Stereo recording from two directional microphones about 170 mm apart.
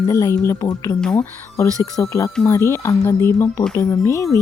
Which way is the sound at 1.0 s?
5° left (ahead or behind).